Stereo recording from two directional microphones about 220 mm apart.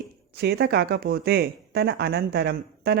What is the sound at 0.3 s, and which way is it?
Speech, 45° right (ahead or behind).